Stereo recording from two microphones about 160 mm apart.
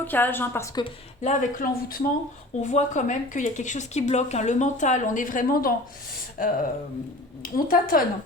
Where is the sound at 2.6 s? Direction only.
45° left (ahead or behind).